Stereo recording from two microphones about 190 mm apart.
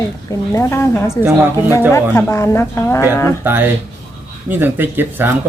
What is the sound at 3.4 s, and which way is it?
Speech, 10° right (ahead or behind).